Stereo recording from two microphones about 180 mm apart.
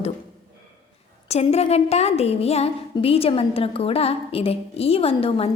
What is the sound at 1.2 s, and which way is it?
Speech, 35° left (ahead or behind).